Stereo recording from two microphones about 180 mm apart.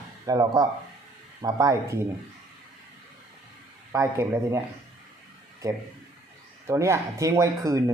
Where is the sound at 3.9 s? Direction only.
15° right (ahead or behind).